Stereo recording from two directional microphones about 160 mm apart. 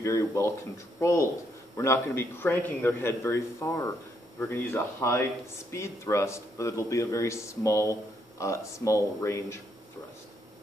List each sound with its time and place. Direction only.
0.0 s a man's voice: 20° left (ahead or behind)